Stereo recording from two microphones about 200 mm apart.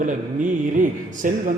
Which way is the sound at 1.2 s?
40° right (ahead or behind).